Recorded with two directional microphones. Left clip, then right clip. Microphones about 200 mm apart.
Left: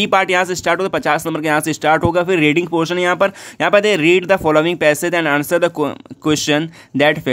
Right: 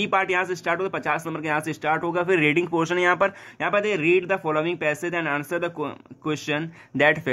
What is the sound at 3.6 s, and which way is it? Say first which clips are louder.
Speech: left 10 dB; 45° left (ahead or behind).